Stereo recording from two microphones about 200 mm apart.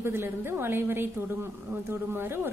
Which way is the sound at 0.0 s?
10° right (ahead or behind).